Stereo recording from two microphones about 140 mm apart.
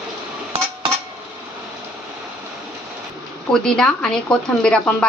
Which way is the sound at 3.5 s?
5° left (ahead or behind).